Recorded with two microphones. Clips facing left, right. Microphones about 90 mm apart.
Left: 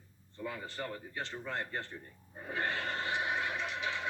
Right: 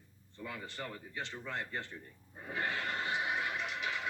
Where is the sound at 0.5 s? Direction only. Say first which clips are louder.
Left 3 dB; 35° left (ahead or behind).